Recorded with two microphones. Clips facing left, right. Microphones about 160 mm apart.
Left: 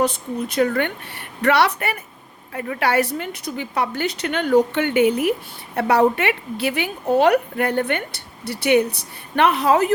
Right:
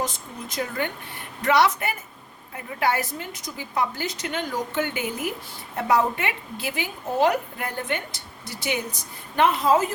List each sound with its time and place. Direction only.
0.0 s a woman's voice: 65° left (ahead or behind)
2.5 s a woman's voice: 80° left